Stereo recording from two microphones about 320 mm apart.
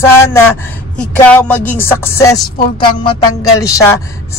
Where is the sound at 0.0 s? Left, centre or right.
Centre.